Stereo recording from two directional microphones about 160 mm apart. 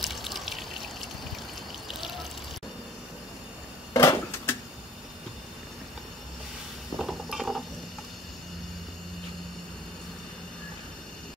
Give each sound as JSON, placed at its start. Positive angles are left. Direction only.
{"t": 0.0, "sound": "water", "side_deg": 0}
{"t": 3.9, "sound": "a sound", "side_deg": 20}
{"t": 7.0, "sound": "dishes", "side_deg": 0}